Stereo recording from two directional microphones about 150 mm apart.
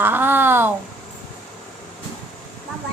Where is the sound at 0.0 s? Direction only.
15° right (ahead or behind).